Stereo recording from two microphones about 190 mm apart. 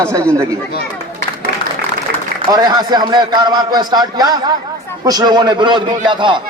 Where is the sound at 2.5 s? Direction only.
20° right (ahead or behind).